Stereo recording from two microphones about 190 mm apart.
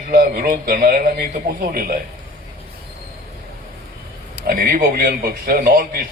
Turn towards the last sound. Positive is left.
turn(degrees=-50)  # may be behind; listen again after turning